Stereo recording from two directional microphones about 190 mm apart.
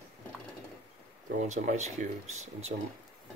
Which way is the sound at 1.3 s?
40° right (ahead or behind).